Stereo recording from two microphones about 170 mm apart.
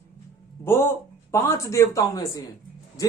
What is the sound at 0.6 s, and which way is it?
A man's voice, 15° left (ahead or behind).